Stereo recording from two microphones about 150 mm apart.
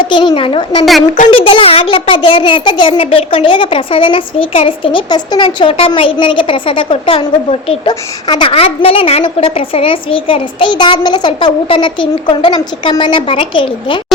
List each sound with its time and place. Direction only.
0.1 s a woman's voice: 30° left (ahead or behind)